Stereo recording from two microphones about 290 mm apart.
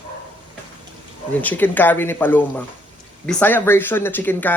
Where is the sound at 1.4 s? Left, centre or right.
Centre.